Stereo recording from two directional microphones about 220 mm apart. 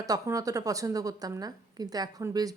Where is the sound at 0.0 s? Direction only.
15° right (ahead or behind).